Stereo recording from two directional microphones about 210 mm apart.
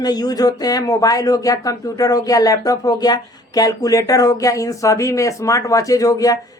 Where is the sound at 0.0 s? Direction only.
20° left (ahead or behind).